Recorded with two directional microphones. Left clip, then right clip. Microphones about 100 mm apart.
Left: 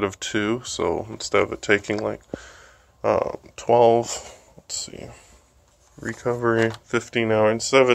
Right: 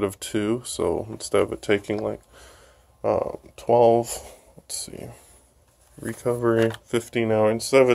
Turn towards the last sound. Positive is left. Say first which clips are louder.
# left 1 dB
turn(degrees=-15)  # may be behind; listen again after turning